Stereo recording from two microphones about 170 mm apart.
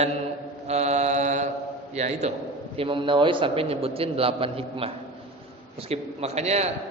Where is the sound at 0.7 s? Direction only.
40° right (ahead or behind).